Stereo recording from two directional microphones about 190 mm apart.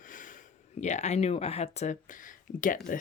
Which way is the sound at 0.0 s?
45° left (ahead or behind).